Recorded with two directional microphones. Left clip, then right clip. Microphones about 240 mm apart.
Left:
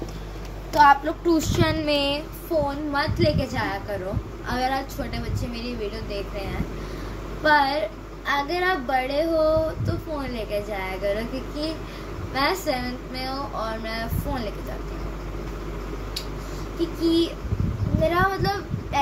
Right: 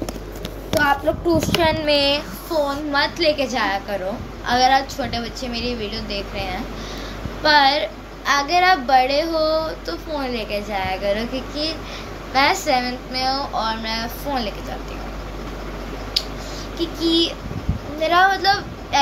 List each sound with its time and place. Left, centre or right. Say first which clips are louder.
0.7 s a child's voice: left 2 dB; centre
1.6 s a child's voice: right 5 dB; left
2.9 s speech: right 6 dB; centre
17.0 s speech: right 4 dB; centre